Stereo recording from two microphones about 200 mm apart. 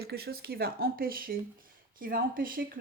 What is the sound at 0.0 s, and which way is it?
Speech, 50° right (ahead or behind).